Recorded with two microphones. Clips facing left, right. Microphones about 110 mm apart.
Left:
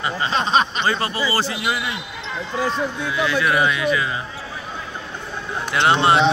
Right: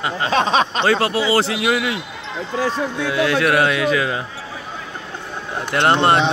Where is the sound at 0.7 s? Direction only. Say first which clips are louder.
Right 5 dB; 80° right.